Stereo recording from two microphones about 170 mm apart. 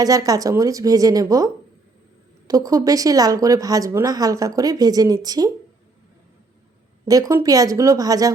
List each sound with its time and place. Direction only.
0.0 s speech: 20° right (ahead or behind)
2.5 s speech: 20° right (ahead or behind)
7.0 s speech: 20° right (ahead or behind)